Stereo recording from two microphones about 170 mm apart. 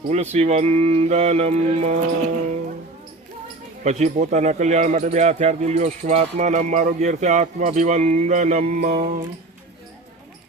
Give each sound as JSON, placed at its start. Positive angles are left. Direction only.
{"t": 0.1, "sound": "mantra", "side_deg": -40}
{"t": 3.8, "sound": "speech", "side_deg": -45}